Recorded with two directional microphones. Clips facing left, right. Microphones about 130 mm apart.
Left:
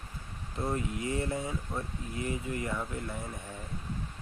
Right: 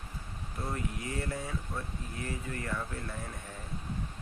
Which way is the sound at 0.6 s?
20° left (ahead or behind).